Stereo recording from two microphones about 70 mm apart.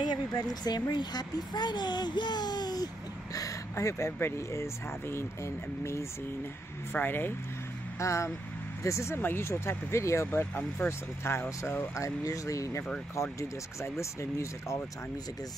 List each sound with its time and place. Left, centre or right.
0.1 s speech: left
3.7 s speech: left
6.9 s speech: left
8.0 s speech: left
10.2 s speech: left
11.9 s speech: left